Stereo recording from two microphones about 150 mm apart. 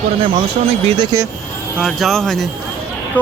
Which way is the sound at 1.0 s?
20° right (ahead or behind).